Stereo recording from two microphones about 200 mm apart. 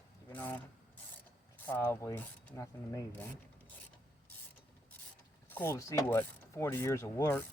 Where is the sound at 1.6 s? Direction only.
10° left (ahead or behind).